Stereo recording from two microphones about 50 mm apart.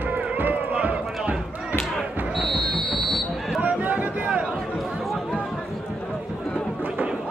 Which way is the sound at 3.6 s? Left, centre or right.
Right.